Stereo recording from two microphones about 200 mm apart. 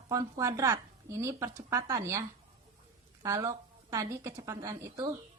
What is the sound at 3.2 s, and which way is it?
A woman's voice, 15° right (ahead or behind).